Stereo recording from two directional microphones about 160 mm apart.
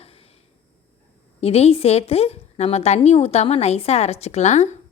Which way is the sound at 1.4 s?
40° left (ahead or behind).